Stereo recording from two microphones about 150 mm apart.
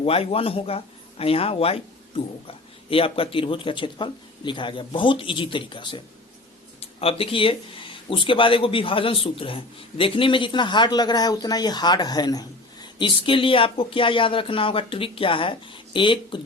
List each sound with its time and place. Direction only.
0.0 s speech: 40° left (ahead or behind)